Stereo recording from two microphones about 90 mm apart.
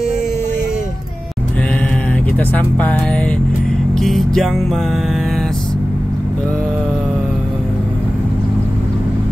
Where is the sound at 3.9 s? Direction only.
Centre (ahead or behind).